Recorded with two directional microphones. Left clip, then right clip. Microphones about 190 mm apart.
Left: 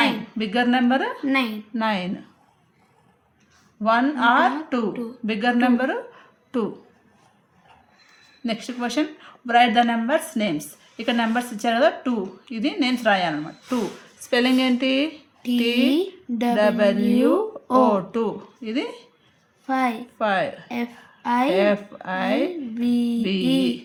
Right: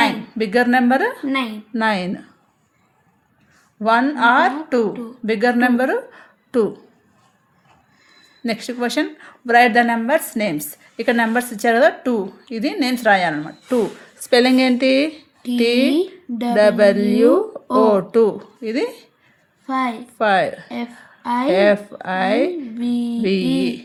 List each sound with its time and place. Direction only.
0.0 s a woman's voice: 35° right (ahead or behind)
1.3 s a woman's voice: 10° left (ahead or behind)
1.7 s a woman's voice: 35° right (ahead or behind)
3.8 s a woman's voice: 35° right (ahead or behind)
8.4 s a woman's voice: 35° right (ahead or behind)
15.9 s a woman's voice: 10° left (ahead or behind)
16.6 s a woman's voice: 35° right (ahead or behind)
19.6 s a woman's voice: 10° left (ahead or behind)
20.1 s a woman's voice: 35° right (ahead or behind)
20.7 s a woman's voice: 10° left (ahead or behind)
21.5 s a woman's voice: 35° right (ahead or behind)
22.8 s a woman's voice: 10° left (ahead or behind)
23.2 s a woman's voice: 35° right (ahead or behind)